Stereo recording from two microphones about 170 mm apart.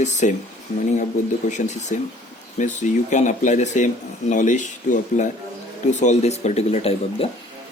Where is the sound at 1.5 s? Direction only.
45° left (ahead or behind).